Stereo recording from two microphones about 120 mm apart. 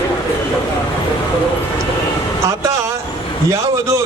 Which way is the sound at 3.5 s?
25° right (ahead or behind).